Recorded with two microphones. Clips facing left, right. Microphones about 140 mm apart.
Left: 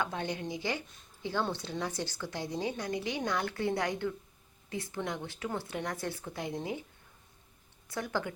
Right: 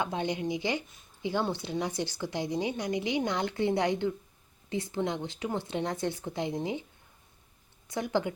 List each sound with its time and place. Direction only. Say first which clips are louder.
0.0 s speech: right 4 dB; 20° right (ahead or behind)
7.9 s speech: right 5 dB; 20° right (ahead or behind)